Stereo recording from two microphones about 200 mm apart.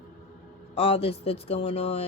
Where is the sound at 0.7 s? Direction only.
30° left (ahead or behind).